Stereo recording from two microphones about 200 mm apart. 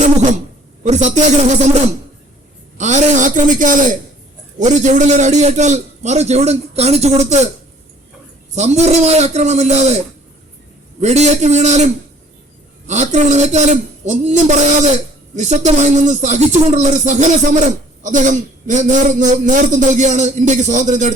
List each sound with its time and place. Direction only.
0.9 s a man's voice: 35° right (ahead or behind)
2.7 s a sound: 35° right (ahead or behind)
4.6 s a man's voice: 35° right (ahead or behind)
8.5 s a man's voice: 35° right (ahead or behind)
11.0 s a man's voice: 35° right (ahead or behind)
12.9 s a man's voice: 35° right (ahead or behind)